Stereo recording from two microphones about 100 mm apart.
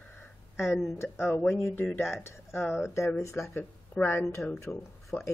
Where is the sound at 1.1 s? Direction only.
20° left (ahead or behind).